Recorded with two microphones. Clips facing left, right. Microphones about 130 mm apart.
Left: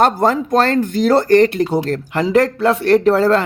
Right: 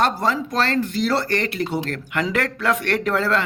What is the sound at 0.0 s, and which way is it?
Speech, 45° left (ahead or behind).